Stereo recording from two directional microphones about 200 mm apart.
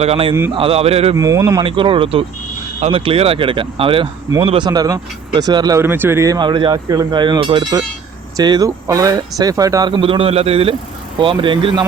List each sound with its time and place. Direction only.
0.0 s speech: 30° right (ahead or behind)
1.1 s speech: 15° right (ahead or behind)
1.6 s speech: 25° right (ahead or behind)